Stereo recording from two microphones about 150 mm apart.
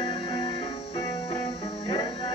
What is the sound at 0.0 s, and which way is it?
Music, 30° left (ahead or behind).